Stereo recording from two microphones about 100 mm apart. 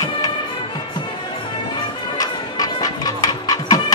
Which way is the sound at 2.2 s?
40° left (ahead or behind).